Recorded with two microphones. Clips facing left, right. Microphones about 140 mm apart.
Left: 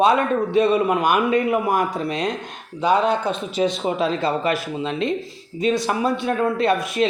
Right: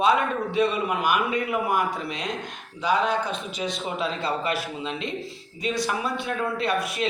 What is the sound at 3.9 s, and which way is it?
Speech, 40° left (ahead or behind).